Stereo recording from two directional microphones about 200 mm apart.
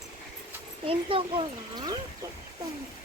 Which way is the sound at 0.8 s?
25° right (ahead or behind).